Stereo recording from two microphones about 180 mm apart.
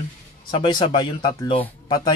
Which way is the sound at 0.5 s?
25° left (ahead or behind).